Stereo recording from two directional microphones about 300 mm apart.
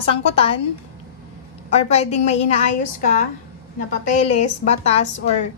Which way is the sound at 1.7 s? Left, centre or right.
Left.